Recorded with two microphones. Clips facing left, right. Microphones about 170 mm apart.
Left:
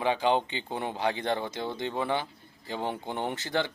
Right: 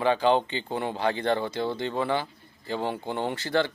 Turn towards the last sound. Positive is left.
turn(degrees=15)  # may be behind; listen again after turning